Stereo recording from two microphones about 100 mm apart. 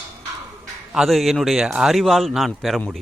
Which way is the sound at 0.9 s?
Centre (ahead or behind).